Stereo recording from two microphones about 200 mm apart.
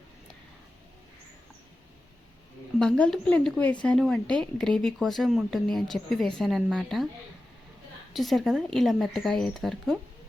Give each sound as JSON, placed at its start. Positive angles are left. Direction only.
{"t": 2.7, "sound": "speech", "side_deg": 5}
{"t": 8.1, "sound": "speech", "side_deg": 0}